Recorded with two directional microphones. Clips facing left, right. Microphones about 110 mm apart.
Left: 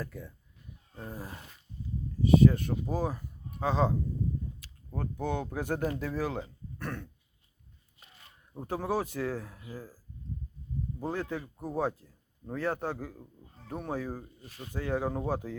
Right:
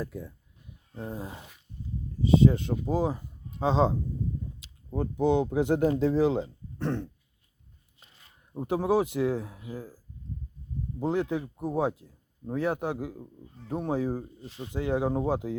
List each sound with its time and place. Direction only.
0.0 s a man's voice: 10° right (ahead or behind)
8.5 s a man's voice: 15° right (ahead or behind)
11.0 s a man's voice: 20° right (ahead or behind)